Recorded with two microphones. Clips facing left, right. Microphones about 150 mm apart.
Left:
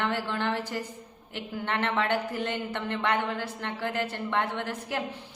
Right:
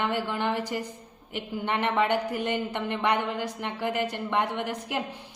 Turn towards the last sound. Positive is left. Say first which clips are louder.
# right 2 dB
turn(degrees=-15)  # may be behind; listen again after turning